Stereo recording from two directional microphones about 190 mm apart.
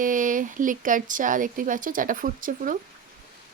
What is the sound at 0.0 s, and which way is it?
Speech, 45° right (ahead or behind).